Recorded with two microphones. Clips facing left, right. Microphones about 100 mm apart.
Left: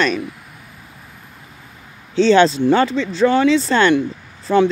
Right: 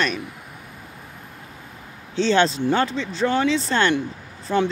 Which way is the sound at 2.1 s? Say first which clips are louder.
Left 6 dB; 90° left.